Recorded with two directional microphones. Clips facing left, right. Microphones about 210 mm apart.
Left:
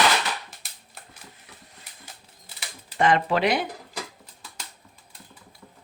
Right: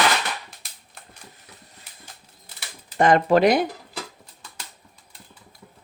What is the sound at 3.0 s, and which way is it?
Speech, 45° right (ahead or behind).